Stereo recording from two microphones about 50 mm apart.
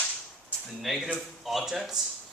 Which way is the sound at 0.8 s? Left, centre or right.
Centre.